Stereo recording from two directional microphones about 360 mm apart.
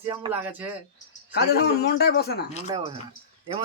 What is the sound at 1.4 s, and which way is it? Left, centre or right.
A man's voice, left.